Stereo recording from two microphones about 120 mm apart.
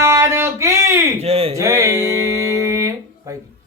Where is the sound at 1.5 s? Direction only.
25° right (ahead or behind).